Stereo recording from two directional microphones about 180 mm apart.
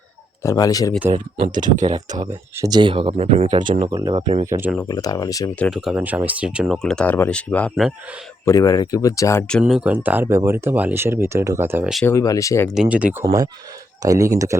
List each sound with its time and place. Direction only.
0.4 s speech: 20° left (ahead or behind)
1.1 s speech: 45° right (ahead or behind)
1.9 s speech: 20° right (ahead or behind)
4.4 s speech: 15° right (ahead or behind)
4.9 s speech: 20° left (ahead or behind)
5.5 s speech: centre (ahead or behind)
8.4 s speech: 20° left (ahead or behind)
9.5 s speech: centre (ahead or behind)
12.0 s speech: 20° left (ahead or behind)
12.7 s speech: 5° right (ahead or behind)
13.2 s speech: 20° right (ahead or behind)